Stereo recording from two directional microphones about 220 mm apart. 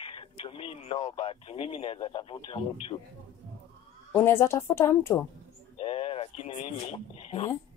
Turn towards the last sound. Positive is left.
turn(degrees=25)  # may be behind; listen again after turning